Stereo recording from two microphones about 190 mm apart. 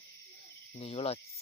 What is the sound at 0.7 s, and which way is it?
Cricket, 30° left (ahead or behind).